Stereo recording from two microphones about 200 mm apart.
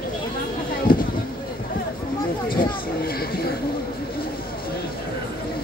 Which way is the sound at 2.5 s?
50° left (ahead or behind).